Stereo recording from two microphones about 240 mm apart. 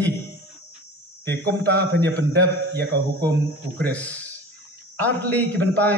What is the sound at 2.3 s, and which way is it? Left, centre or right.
Speech, right.